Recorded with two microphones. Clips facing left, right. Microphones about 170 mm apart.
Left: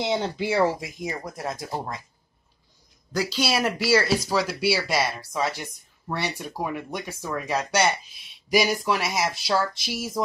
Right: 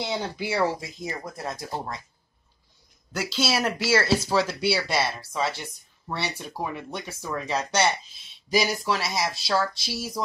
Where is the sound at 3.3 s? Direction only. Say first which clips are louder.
Right 1 dB; 10° left (ahead or behind).